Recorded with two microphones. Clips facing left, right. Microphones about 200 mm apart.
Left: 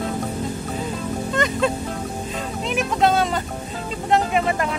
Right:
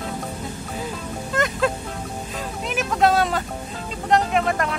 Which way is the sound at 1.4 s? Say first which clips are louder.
Even; centre (ahead or behind).